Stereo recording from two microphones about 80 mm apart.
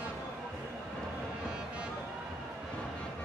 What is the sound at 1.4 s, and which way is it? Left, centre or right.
Music, centre.